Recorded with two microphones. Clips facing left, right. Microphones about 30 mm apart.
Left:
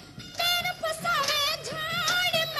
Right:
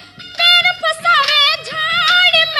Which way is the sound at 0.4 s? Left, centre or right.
Right.